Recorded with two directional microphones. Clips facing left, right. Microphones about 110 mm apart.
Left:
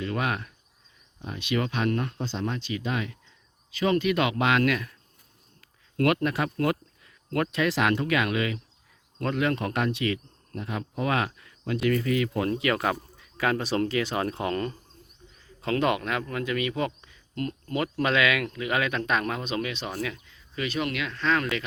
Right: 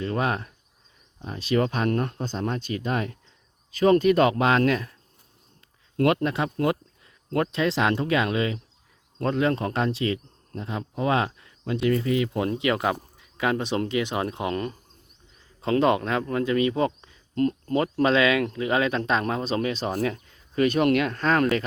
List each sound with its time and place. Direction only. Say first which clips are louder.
0.0 s speech: right 3 dB; 35° right (ahead or behind)
6.0 s speech: right 2 dB; 25° right (ahead or behind)
15.6 s speech: right 4 dB; 30° right (ahead or behind); by 21.4 s 45° right (ahead or behind)